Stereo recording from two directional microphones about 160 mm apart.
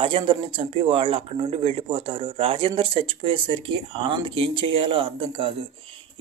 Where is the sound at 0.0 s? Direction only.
35° right (ahead or behind).